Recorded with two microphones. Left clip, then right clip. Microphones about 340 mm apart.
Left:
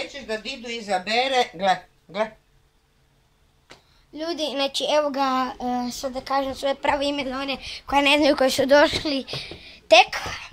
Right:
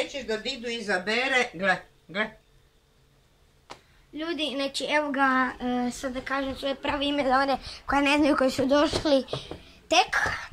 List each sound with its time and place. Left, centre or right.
0.7 s speech: left
1.3 s speech: centre
4.1 s a woman's voice: centre
7.2 s speech: centre